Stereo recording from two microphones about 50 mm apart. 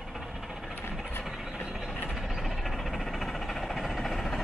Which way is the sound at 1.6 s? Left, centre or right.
Centre.